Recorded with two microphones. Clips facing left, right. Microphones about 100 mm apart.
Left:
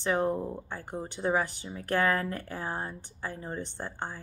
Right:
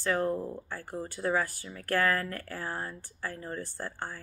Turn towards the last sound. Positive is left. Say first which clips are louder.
# left 1 dB
turn(degrees=20)  # may be behind; listen again after turning